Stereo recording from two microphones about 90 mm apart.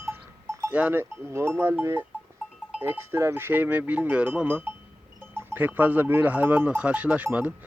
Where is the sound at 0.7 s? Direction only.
20° right (ahead or behind).